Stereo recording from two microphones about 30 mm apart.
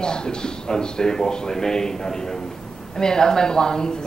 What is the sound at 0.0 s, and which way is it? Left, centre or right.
A man's voice, left.